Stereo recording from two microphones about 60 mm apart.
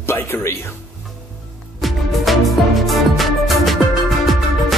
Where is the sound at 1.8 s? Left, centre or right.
Centre.